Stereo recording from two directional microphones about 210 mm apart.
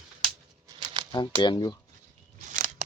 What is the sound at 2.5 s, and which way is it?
Scissors, 40° right (ahead or behind).